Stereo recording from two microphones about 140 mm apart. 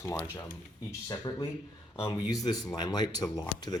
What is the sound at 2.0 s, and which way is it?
Speech, 40° left (ahead or behind).